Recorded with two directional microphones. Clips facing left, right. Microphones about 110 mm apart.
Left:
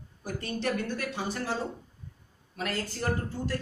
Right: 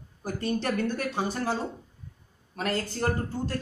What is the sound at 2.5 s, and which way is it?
A woman's voice, 40° right (ahead or behind).